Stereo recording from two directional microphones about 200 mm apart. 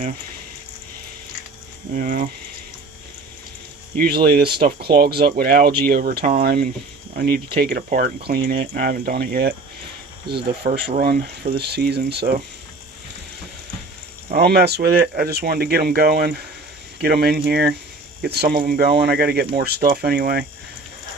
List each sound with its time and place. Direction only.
1.9 s speech: 40° right (ahead or behind)
3.9 s speech: 50° right (ahead or behind)
14.3 s speech: 55° right (ahead or behind)